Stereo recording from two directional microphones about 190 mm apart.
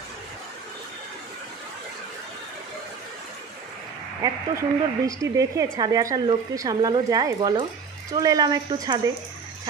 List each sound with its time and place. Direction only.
4.2 s speech: 15° right (ahead or behind)